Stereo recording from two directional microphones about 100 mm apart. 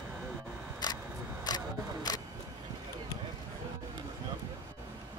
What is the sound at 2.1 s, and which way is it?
Vehicle, 40° left (ahead or behind).